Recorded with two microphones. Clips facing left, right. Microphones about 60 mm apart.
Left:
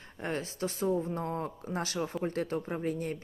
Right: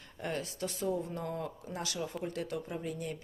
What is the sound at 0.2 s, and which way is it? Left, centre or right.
Speech, left.